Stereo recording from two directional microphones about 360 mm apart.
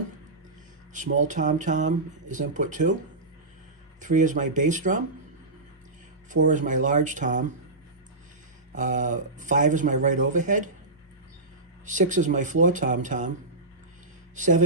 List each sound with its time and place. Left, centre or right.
1.2 s speech: right
4.0 s speech: right
6.3 s speech: right
8.7 s speech: right
11.9 s speech: right
14.3 s speech: right